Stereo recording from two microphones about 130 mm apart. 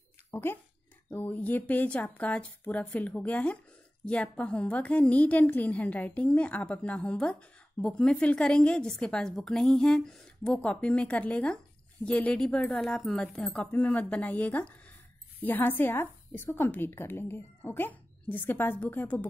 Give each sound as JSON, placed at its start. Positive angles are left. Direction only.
{"t": 0.3, "sound": "a woman's voice", "side_deg": 15}